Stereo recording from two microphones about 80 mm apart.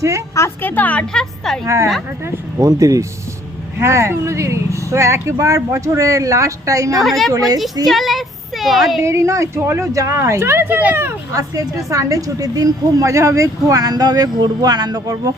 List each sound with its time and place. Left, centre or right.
0.6 s a woman's voice: left
1.1 s a woman's voice: centre
1.6 s a woman's voice: right
7.0 s a woman's voice: centre
7.3 s a woman's voice: right
7.9 s speech: centre
9.0 s a woman's voice: right
11.3 s a woman's voice: right